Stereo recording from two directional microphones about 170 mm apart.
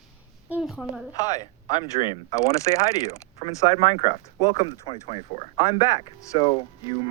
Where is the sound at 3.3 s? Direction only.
35° left (ahead or behind).